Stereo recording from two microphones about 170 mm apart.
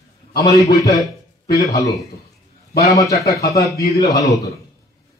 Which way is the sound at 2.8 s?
20° left (ahead or behind).